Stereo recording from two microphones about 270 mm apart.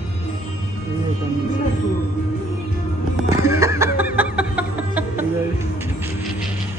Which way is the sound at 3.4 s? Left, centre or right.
Centre.